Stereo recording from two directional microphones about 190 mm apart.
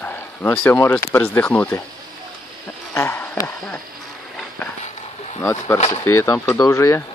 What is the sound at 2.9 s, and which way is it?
Speech, 10° left (ahead or behind).